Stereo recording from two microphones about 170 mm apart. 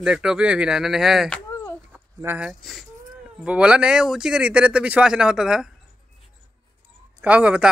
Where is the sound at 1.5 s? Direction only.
20° left (ahead or behind).